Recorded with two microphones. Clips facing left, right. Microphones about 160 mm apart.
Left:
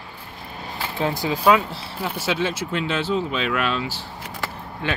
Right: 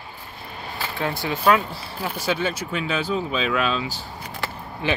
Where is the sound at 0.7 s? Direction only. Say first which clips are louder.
Left 2 dB; 20° left (ahead or behind).